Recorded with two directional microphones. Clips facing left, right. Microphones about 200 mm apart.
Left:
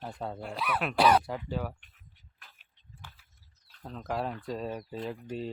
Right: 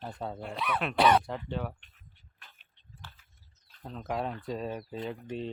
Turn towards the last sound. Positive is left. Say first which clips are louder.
# even
turn(degrees=0)  # may be behind; listen again after turning